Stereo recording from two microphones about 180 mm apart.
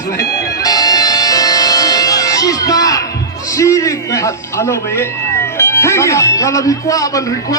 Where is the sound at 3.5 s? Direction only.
15° left (ahead or behind).